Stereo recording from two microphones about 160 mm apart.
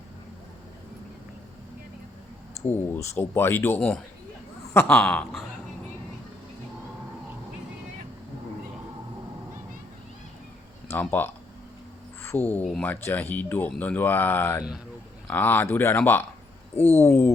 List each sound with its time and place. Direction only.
2.9 s speech: 15° left (ahead or behind)
10.9 s speech: 10° left (ahead or behind)
16.7 s speech: 40° left (ahead or behind)
17.0 s speech: 15° left (ahead or behind)